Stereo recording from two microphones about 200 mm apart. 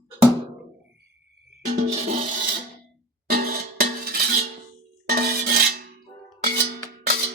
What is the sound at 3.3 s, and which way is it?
Cowbell, 45° right (ahead or behind).